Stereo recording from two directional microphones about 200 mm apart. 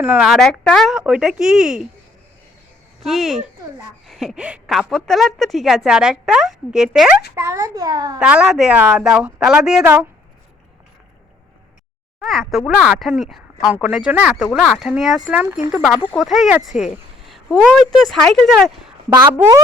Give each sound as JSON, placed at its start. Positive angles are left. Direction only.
{"t": 0.0, "sound": "a woman's voice", "side_deg": -5}
{"t": 3.0, "sound": "a woman's voice", "side_deg": 0}
{"t": 7.3, "sound": "a child's voice", "side_deg": -15}
{"t": 8.2, "sound": "a woman's voice", "side_deg": -5}
{"t": 12.2, "sound": "a woman's voice", "side_deg": 0}
{"t": 19.1, "sound": "speech", "side_deg": -20}